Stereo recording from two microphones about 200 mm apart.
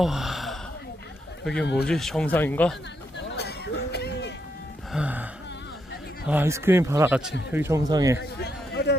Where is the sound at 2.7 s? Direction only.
60° left (ahead or behind).